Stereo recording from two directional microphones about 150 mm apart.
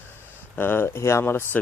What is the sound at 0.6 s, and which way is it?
Speech, 15° left (ahead or behind).